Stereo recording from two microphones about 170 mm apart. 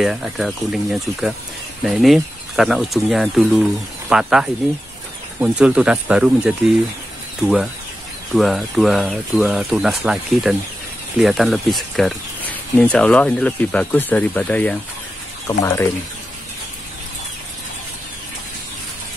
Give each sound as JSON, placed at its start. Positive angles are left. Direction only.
{"t": 0.0, "sound": "speech", "side_deg": -5}
{"t": 8.4, "sound": "speech", "side_deg": 0}